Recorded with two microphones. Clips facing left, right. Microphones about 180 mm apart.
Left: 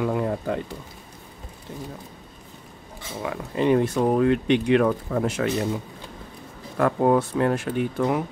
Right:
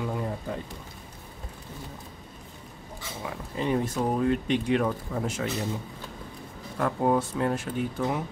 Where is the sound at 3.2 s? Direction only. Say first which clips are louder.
Left 7 dB; 70° left (ahead or behind).